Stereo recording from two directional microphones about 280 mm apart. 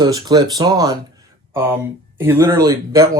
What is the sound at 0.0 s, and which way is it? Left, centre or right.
Speech, centre.